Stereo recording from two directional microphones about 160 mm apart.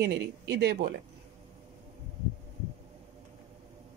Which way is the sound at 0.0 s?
90° right.